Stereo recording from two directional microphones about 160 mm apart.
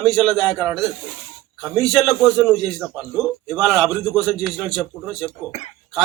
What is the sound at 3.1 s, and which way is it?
Speech, centre (ahead or behind).